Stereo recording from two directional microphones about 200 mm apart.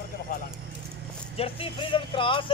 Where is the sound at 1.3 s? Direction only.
30° left (ahead or behind).